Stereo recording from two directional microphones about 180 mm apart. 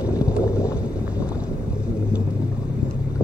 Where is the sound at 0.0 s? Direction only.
20° left (ahead or behind).